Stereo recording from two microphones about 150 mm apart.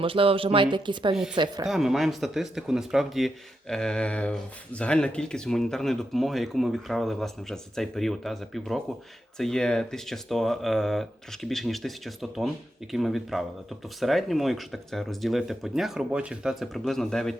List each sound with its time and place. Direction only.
0.0 s speech: 35° right (ahead or behind)
1.1 s speech: 5° right (ahead or behind)